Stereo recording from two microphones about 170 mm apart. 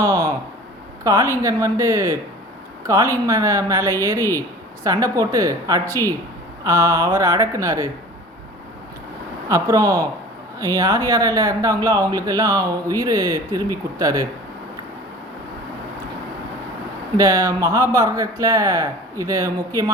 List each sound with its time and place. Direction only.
0.0 s a sound: 20° right (ahead or behind)
1.0 s speech: 20° right (ahead or behind)
9.5 s speech: 20° right (ahead or behind)
17.2 s speech: 20° right (ahead or behind)